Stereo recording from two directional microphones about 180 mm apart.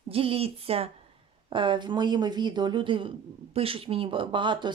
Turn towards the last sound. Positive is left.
turn(degrees=-25)  # may be behind; listen again after turning